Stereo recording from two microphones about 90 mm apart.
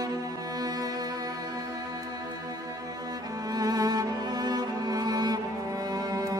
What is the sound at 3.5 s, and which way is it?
Music, 45° right (ahead or behind).